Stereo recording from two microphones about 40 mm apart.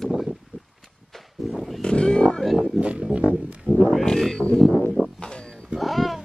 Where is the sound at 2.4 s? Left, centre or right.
Centre.